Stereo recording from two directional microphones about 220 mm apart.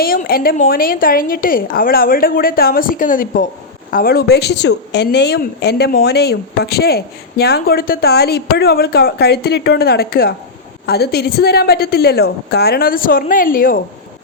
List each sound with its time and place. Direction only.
0.0 s a woman's voice: 40° left (ahead or behind)